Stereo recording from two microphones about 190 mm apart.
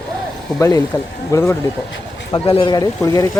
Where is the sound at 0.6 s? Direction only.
15° left (ahead or behind).